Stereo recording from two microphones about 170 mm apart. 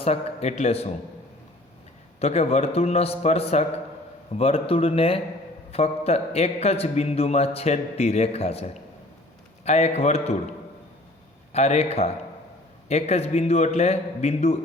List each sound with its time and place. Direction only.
0.0 s a man's voice: 35° left (ahead or behind)
2.1 s a man's voice: 40° left (ahead or behind)
11.5 s a man's voice: 40° left (ahead or behind)